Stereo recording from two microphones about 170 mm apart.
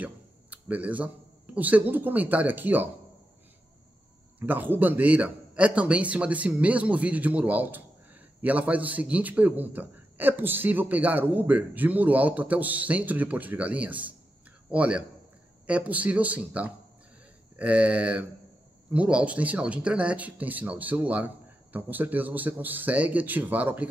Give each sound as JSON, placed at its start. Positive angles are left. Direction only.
{"t": 0.0, "sound": "speech", "side_deg": -10}
{"t": 4.4, "sound": "a man's voice", "side_deg": -10}